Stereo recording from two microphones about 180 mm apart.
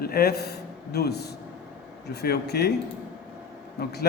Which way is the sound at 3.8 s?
65° left (ahead or behind).